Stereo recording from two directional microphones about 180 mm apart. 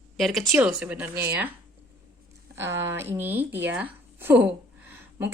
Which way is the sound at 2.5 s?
15° right (ahead or behind).